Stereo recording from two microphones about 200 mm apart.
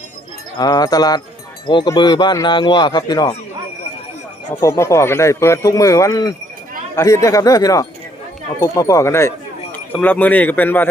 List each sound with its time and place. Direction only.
0.6 s speech: 20° left (ahead or behind)
4.6 s speech: 15° left (ahead or behind)